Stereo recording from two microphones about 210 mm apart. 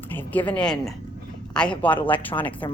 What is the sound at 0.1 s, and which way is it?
Speech, 10° left (ahead or behind).